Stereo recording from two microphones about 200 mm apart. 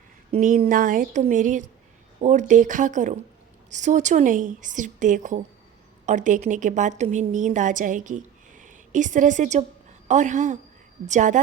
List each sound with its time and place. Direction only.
0.3 s a woman's voice: 45° right (ahead or behind)